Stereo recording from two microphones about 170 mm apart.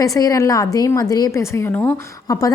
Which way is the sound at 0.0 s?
20° left (ahead or behind).